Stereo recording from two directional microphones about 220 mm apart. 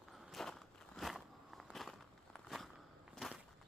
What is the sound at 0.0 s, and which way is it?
Walk, centre (ahead or behind).